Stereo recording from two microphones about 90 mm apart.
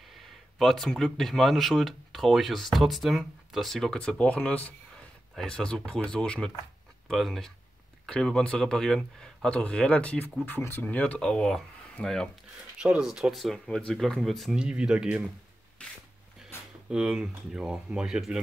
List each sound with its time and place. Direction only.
0.1 s speech: centre (ahead or behind)
12.7 s speech: 10° right (ahead or behind)
16.5 s a sound: 25° left (ahead or behind)
16.9 s speech: 10° right (ahead or behind)